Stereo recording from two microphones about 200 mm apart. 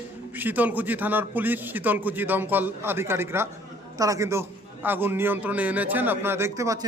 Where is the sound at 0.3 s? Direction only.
10° right (ahead or behind).